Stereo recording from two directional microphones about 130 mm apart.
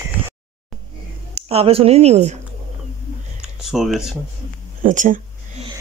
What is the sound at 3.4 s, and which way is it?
Speech, 5° right (ahead or behind).